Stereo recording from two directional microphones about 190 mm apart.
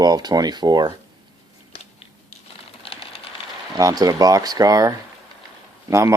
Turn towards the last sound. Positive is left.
turn(degrees=-15)  # may be behind; listen again after turning